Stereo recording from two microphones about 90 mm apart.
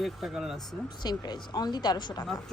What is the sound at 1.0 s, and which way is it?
Speech, 50° left (ahead or behind).